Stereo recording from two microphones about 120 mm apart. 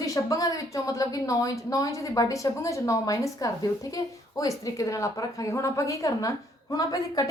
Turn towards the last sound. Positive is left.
turn(degrees=30)  # may be behind; listen again after turning